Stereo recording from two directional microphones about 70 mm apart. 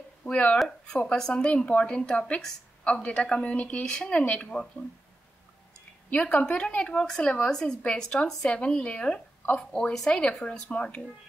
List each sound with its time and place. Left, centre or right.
0.2 s speech: centre
6.0 s speech: centre